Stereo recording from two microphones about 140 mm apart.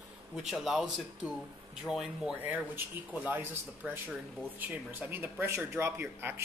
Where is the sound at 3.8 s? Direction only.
10° right (ahead or behind).